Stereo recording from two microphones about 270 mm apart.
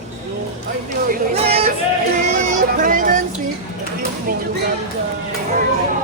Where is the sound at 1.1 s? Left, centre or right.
Right.